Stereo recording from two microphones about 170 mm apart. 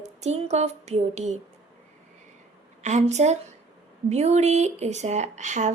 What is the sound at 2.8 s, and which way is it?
Speech, 45° right (ahead or behind).